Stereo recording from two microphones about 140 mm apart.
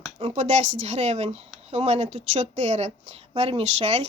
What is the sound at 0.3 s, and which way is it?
Speech, 60° right (ahead or behind).